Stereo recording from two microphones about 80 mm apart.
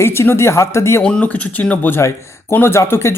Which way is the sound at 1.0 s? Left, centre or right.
Centre.